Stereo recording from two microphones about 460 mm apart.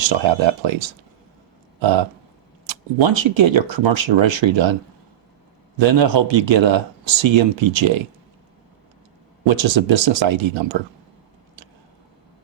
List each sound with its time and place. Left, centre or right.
0.1 s speech: right
5.8 s speech: right
9.5 s speech: right